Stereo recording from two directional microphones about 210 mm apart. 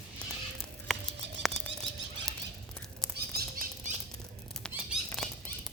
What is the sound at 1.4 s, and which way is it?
Bird flight, centre (ahead or behind).